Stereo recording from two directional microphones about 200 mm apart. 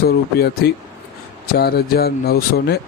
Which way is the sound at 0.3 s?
50° left (ahead or behind).